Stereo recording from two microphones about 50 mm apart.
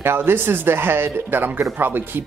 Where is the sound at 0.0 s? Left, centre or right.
Right.